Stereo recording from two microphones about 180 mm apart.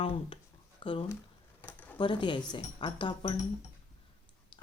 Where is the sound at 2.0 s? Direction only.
25° left (ahead or behind).